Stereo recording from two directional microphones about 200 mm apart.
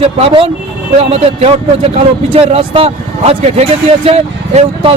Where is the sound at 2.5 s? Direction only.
30° right (ahead or behind).